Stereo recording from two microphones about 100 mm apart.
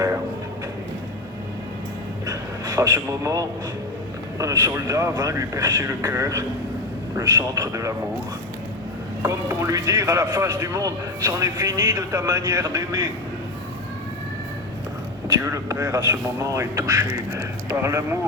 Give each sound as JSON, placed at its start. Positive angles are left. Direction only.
{"t": 2.2, "sound": "a sound", "side_deg": -35}
{"t": 4.4, "sound": "speech", "side_deg": -35}
{"t": 9.2, "sound": "speech", "side_deg": -30}
{"t": 15.3, "sound": "speech", "side_deg": -30}